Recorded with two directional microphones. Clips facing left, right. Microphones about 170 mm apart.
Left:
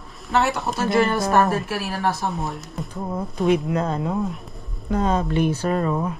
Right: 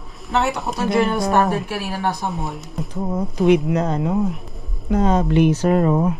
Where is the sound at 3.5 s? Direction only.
15° right (ahead or behind).